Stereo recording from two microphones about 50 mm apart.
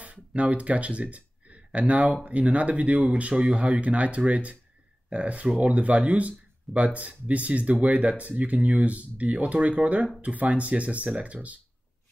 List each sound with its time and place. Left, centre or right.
0.0 s speech: right